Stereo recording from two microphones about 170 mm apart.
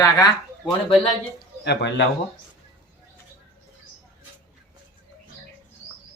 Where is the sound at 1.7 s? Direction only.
85° left.